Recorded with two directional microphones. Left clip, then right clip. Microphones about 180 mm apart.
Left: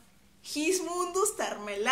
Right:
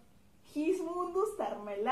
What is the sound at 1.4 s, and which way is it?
Speech, 20° left (ahead or behind).